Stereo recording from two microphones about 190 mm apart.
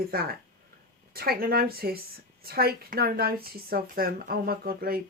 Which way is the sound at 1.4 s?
50° right (ahead or behind).